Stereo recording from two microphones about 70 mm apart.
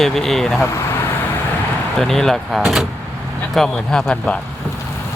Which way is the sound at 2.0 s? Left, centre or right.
Centre.